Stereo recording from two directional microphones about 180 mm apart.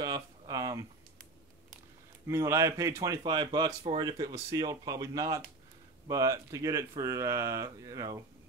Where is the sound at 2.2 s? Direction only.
15° right (ahead or behind).